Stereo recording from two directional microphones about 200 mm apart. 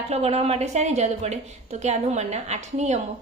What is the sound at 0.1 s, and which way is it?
A woman's voice, 30° right (ahead or behind).